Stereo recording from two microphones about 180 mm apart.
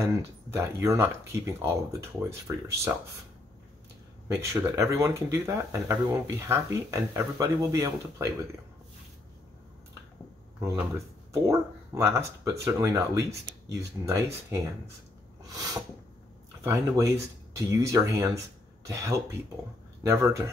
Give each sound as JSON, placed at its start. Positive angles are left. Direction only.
{"t": 0.0, "sound": "speech", "side_deg": -15}
{"t": 4.4, "sound": "speech", "side_deg": -15}
{"t": 11.4, "sound": "speech", "side_deg": -15}
{"t": 15.4, "sound": "a sound", "side_deg": -20}
{"t": 16.6, "sound": "speech", "side_deg": -15}